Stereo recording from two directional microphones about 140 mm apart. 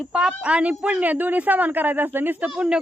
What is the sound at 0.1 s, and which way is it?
Speech, 5° right (ahead or behind).